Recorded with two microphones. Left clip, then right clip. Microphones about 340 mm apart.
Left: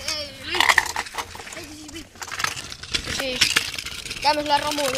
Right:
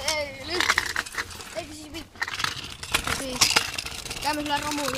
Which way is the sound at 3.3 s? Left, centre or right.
Centre.